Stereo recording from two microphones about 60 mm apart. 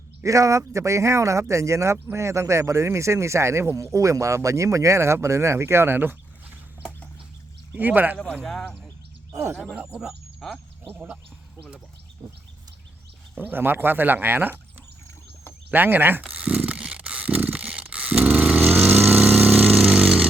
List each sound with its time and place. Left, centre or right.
0.3 s speech: right
7.7 s speech: right
8.4 s speech: centre
10.4 s speech: centre
10.8 s speech: right
13.3 s speech: right
15.7 s speech: right
16.6 s a sound: right
18.2 s vehicle: right
19.9 s a sound: centre